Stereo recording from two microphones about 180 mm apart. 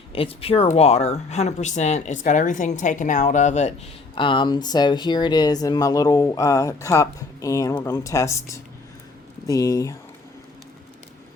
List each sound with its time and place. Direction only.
0.1 s speech: 30° left (ahead or behind)
4.1 s speech: 25° left (ahead or behind)